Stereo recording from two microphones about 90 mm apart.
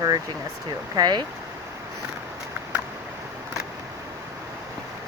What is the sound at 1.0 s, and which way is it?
Speech, 50° right (ahead or behind).